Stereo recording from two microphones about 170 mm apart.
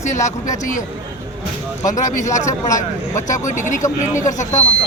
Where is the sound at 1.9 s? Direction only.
45° left (ahead or behind).